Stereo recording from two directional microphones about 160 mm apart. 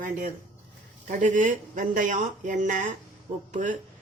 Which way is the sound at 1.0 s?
55° right (ahead or behind).